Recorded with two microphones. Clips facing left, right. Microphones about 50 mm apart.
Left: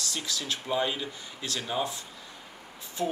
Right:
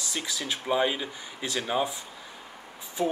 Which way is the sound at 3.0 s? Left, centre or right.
Centre.